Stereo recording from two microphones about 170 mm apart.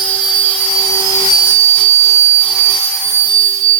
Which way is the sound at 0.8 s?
20° left (ahead or behind).